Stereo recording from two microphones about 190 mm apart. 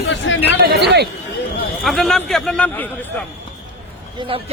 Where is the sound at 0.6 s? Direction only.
60° right (ahead or behind).